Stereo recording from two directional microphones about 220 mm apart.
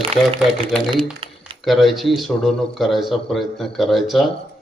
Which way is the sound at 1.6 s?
Centre (ahead or behind).